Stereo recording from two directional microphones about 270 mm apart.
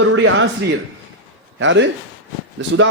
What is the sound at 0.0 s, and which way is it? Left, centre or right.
Speech, right.